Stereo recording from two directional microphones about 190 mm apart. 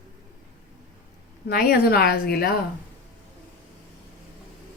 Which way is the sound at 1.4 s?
55° left (ahead or behind).